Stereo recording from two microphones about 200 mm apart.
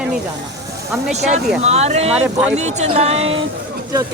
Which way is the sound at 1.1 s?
35° right (ahead or behind).